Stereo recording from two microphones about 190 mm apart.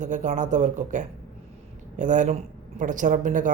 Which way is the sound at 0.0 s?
40° right (ahead or behind).